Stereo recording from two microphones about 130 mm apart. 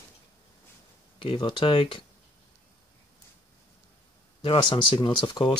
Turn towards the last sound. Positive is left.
turn(degrees=35)  # may be behind; listen again after turning